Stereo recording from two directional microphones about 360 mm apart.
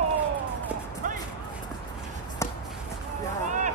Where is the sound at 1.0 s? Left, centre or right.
Right.